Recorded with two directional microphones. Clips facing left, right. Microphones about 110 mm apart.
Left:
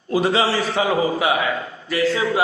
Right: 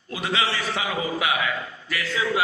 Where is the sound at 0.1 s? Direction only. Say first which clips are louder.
Left 8 dB; 35° left (ahead or behind).